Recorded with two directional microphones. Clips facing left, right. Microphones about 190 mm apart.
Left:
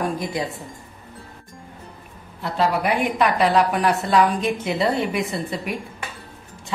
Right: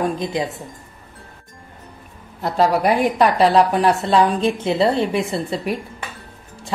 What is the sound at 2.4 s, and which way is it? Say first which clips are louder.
A woman's voice: right 4 dB; 40° right (ahead or behind).